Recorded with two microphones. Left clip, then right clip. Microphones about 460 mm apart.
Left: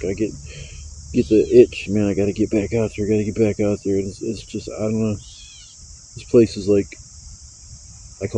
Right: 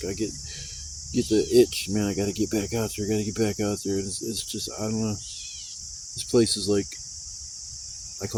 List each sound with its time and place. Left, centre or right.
0.0 s speech: right